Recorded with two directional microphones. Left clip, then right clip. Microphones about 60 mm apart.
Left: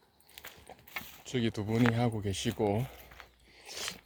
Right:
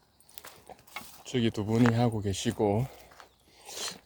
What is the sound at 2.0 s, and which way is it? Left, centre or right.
Speech, right.